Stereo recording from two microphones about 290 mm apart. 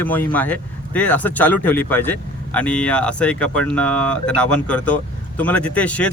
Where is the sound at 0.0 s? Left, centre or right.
Centre.